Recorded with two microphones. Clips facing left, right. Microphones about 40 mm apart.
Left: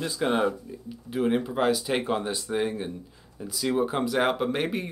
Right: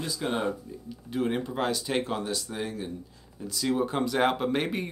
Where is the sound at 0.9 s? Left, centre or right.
Centre; by 2.9 s left.